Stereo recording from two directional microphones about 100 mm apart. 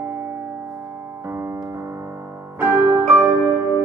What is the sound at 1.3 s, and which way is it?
Piano, 25° right (ahead or behind).